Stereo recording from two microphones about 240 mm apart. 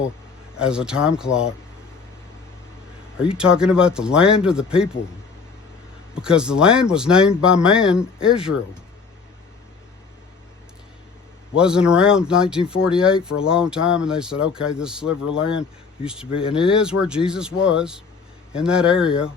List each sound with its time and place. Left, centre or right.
0.5 s speech: centre
3.3 s speech: centre
6.1 s speech: centre
11.5 s speech: centre
16.3 s speech: left
16.6 s speech: centre